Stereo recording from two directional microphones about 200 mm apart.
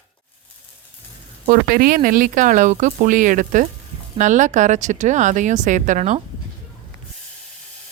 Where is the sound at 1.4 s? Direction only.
45° right (ahead or behind).